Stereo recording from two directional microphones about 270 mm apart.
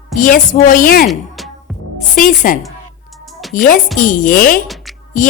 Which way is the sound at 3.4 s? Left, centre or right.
Centre.